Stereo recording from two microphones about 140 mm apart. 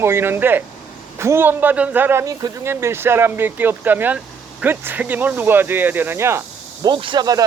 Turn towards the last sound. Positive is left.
turn(degrees=-25)  # may be behind; listen again after turning